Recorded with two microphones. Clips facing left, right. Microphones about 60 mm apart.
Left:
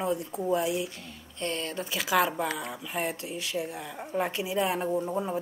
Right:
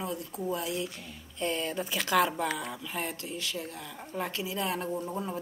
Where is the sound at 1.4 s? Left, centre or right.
Centre.